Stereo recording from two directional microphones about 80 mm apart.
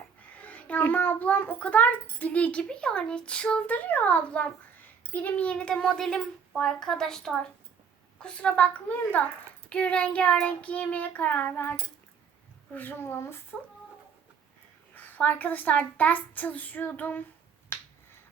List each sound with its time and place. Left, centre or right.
0.2 s a child's voice: centre
14.9 s a child's voice: left
17.7 s finger snapping: left